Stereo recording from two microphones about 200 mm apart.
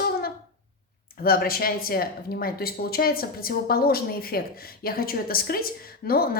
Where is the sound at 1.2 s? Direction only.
50° left (ahead or behind).